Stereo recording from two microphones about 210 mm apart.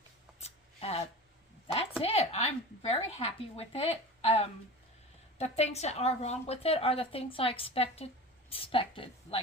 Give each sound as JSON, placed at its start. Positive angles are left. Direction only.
{"t": 0.3, "sound": "shuffling cards", "side_deg": 30}
{"t": 1.6, "sound": "a sound", "side_deg": 30}
{"t": 2.9, "sound": "a woman's voice", "side_deg": 30}